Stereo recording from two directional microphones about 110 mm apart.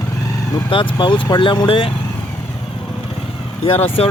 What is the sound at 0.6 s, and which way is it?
Speech, 45° left (ahead or behind).